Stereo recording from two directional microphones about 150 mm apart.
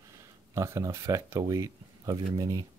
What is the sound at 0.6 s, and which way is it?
Speech, 20° right (ahead or behind).